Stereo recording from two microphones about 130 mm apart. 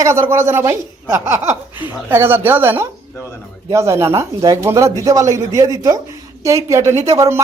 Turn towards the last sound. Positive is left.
turn(degrees=-25)  # may be behind; listen again after turning